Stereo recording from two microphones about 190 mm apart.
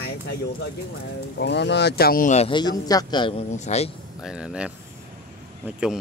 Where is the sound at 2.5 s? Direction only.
20° left (ahead or behind).